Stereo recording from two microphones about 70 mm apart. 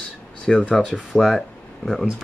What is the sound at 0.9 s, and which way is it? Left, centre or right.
Speech, centre.